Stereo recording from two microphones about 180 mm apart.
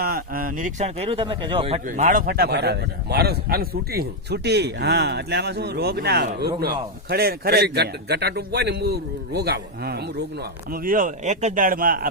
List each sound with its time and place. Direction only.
0.0 s speech: 55° right (ahead or behind)
10.7 s speech: 50° right (ahead or behind)